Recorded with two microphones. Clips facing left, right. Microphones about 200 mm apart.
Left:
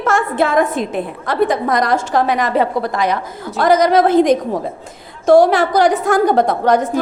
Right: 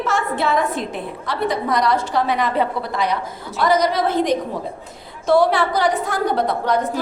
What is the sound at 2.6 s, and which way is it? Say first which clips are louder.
Speech: left 4 dB; 90° left.